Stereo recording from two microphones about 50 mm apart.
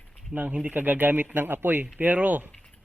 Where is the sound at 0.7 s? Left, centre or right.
Right.